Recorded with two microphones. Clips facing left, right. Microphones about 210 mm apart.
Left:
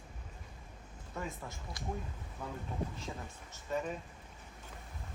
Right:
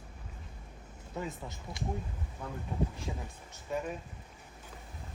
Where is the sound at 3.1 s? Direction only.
10° right (ahead or behind).